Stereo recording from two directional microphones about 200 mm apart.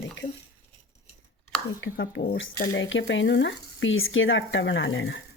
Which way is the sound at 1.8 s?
65° left (ahead or behind).